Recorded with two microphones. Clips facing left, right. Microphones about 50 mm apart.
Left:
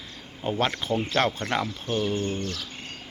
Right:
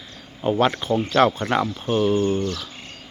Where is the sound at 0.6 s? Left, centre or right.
Centre.